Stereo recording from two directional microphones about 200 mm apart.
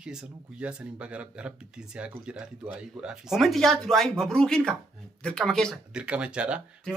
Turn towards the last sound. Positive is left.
turn(degrees=-5)  # may be behind; listen again after turning